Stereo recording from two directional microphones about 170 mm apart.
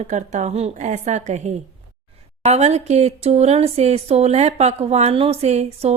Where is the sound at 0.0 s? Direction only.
45° right (ahead or behind).